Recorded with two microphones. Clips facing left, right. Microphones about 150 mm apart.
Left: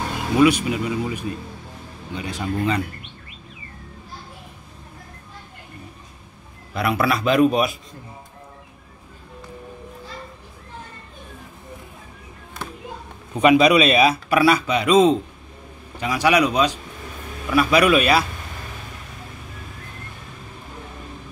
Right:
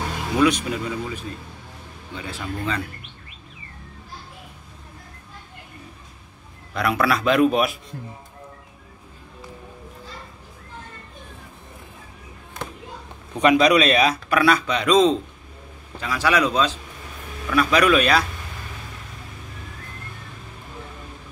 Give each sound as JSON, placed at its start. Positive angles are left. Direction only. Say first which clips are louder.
{"t": 0.4, "sound": "speech", "louder": "left 3 dB", "side_deg": 5}
{"t": 6.7, "sound": "a man's voice", "louder": "even", "side_deg": 5}
{"t": 13.3, "sound": "speech", "louder": "left 2 dB", "side_deg": 10}